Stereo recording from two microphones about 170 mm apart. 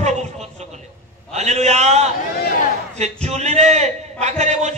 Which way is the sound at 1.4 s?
40° right (ahead or behind).